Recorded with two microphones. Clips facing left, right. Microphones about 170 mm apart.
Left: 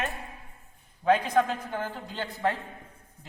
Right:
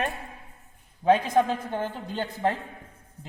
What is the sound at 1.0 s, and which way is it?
A man's voice, 25° right (ahead or behind).